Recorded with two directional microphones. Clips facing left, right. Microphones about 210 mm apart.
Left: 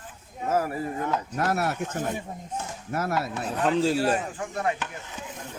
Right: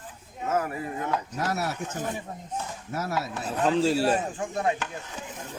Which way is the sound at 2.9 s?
55° left (ahead or behind).